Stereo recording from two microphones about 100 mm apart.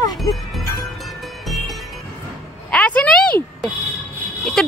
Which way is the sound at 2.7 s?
15° left (ahead or behind).